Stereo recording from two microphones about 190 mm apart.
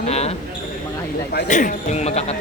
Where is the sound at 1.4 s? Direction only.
40° left (ahead or behind).